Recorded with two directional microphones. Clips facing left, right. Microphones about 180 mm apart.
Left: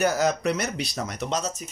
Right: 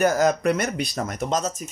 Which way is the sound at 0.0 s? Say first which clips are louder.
Right 3 dB; 50° right (ahead or behind).